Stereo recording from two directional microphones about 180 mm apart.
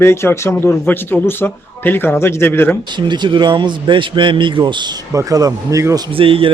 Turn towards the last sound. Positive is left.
turn(degrees=-30)  # may be behind; listen again after turning